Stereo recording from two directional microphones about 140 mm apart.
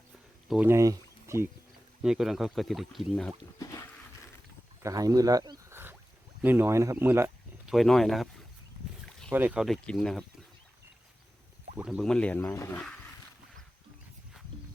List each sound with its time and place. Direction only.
0.4 s speech: centre (ahead or behind)
0.7 s speech: 20° right (ahead or behind)
2.0 s speech: 5° right (ahead or behind)
4.8 s speech: 25° right (ahead or behind)
7.7 s speech: centre (ahead or behind)
9.3 s speech: 10° right (ahead or behind)
9.6 s speech: 5° left (ahead or behind)
11.8 s speech: 10° right (ahead or behind)
12.0 s speech: 5° left (ahead or behind)
12.4 s speech: 20° left (ahead or behind)